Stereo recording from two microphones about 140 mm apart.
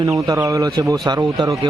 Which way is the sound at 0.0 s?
30° right (ahead or behind).